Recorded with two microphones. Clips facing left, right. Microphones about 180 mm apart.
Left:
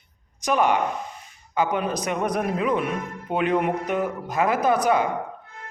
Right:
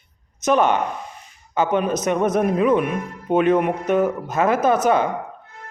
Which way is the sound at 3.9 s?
15° left (ahead or behind).